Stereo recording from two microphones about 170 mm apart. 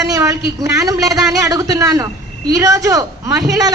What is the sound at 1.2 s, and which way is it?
A man's voice, 20° right (ahead or behind).